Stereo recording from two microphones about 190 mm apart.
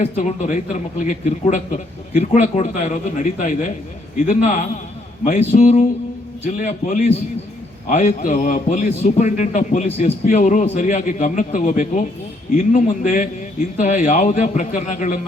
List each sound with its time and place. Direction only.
0.0 s a man's voice: 40° left (ahead or behind)